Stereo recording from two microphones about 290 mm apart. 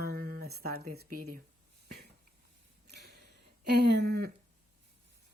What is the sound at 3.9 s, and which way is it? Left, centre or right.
Speech, right.